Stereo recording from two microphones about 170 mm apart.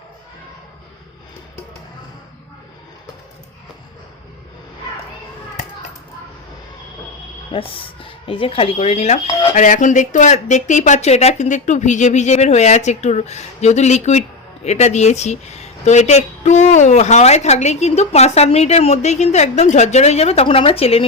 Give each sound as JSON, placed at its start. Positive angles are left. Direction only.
{"t": 7.5, "sound": "speech", "side_deg": 30}